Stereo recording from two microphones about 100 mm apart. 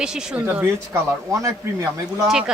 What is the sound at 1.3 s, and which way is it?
Speech, 35° right (ahead or behind).